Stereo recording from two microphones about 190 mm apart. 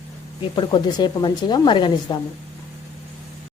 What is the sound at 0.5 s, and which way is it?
A woman's voice, 25° left (ahead or behind).